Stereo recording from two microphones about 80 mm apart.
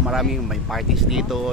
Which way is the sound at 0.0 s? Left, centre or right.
Centre.